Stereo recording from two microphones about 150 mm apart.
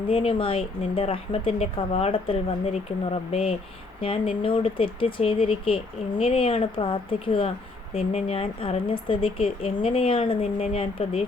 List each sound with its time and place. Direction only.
0.1 s speech: 40° left (ahead or behind)